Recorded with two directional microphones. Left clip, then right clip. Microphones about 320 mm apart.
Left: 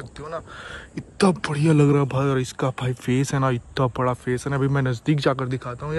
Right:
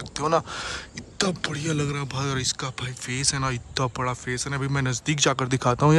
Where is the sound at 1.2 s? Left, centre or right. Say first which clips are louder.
Left 5 dB; centre.